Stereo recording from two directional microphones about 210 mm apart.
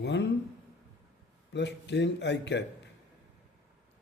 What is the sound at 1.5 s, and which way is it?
A man's voice, 55° left (ahead or behind).